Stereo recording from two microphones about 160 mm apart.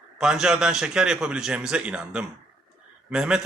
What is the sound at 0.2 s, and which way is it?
A man's voice, 5° right (ahead or behind).